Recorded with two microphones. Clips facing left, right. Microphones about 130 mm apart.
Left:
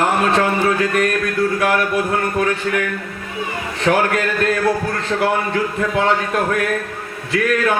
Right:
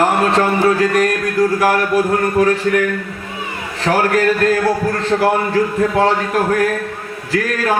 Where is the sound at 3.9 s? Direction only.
30° right (ahead or behind).